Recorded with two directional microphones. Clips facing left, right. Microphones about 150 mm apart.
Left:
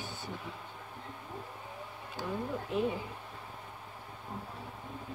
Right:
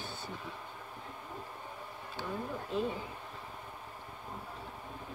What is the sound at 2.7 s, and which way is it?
Speech, 15° left (ahead or behind).